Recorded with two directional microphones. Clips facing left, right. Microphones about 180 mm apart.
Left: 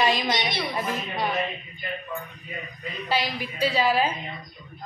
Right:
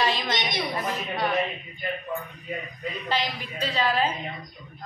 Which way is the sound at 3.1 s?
10° left (ahead or behind).